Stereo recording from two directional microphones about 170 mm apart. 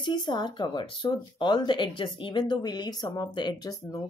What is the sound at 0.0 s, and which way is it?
Speech, 25° left (ahead or behind).